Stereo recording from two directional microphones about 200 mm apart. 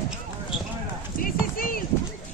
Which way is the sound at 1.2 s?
45° left (ahead or behind).